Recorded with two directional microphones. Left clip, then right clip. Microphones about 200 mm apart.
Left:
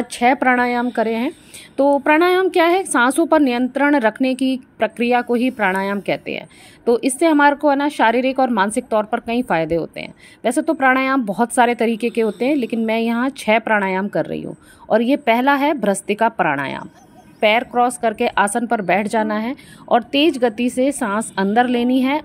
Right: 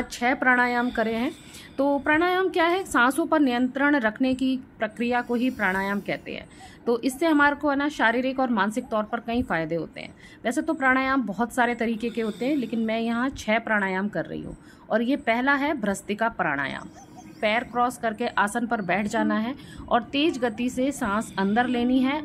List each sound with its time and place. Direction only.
0.0 s a woman's voice: 30° left (ahead or behind)
0.9 s a sound: 30° left (ahead or behind)
2.1 s a woman's voice: 40° left (ahead or behind)